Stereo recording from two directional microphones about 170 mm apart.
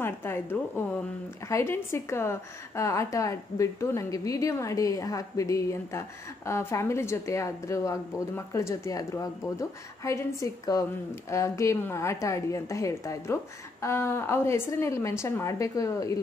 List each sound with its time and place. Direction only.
0.0 s a woman's voice: 15° left (ahead or behind)